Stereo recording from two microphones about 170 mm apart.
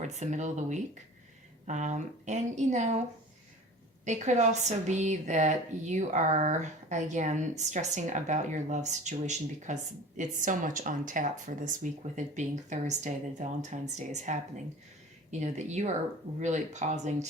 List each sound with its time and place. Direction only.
0.0 s speech: 45° right (ahead or behind)
4.0 s speech: 45° right (ahead or behind)